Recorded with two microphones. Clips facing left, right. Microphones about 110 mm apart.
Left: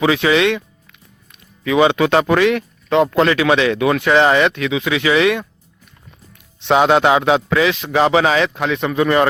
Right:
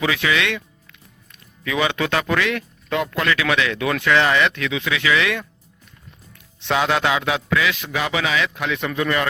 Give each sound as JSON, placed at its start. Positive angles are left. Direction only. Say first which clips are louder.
{"t": 0.0, "sound": "speech", "louder": "left 7 dB", "side_deg": 30}
{"t": 6.6, "sound": "speech", "louder": "left 7 dB", "side_deg": 25}